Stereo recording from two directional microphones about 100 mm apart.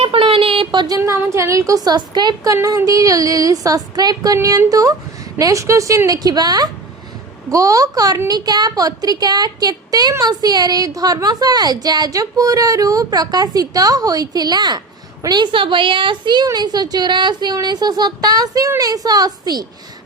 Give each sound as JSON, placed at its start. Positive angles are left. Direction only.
{"t": 0.0, "sound": "a sound", "side_deg": -65}
{"t": 0.9, "sound": "a woman's voice", "side_deg": -30}
{"t": 2.5, "sound": "a woman's voice", "side_deg": -35}